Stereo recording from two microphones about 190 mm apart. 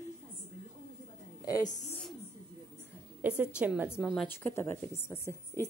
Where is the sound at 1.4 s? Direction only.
20° left (ahead or behind).